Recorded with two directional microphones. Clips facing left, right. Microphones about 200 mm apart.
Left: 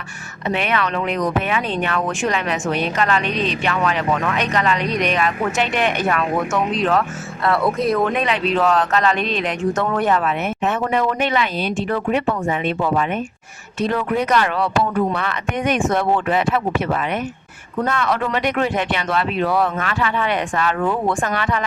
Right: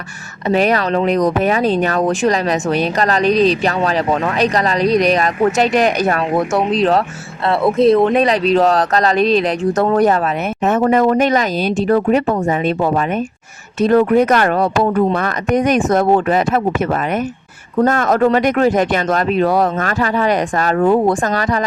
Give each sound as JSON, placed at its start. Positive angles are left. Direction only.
{"t": 0.4, "sound": "speech", "side_deg": -40}